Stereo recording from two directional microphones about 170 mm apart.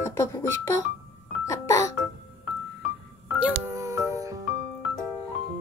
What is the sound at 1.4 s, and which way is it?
Music, 20° left (ahead or behind).